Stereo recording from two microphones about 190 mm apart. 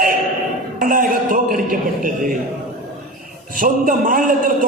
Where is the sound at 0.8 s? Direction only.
45° right (ahead or behind).